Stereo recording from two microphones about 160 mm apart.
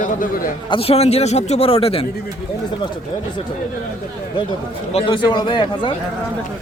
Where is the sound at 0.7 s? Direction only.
35° left (ahead or behind).